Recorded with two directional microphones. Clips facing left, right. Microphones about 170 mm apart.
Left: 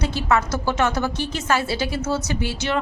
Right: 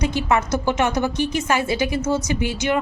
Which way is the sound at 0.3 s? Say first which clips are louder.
Left 1 dB; 20° right (ahead or behind).